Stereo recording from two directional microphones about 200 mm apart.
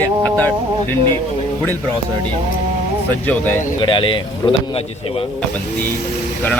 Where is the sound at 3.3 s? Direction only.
10° left (ahead or behind).